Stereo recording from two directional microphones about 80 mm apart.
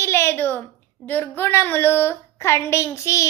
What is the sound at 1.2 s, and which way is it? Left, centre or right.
A woman's voice, left.